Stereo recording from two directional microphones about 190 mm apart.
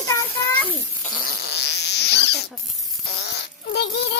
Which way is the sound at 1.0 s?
50° left (ahead or behind).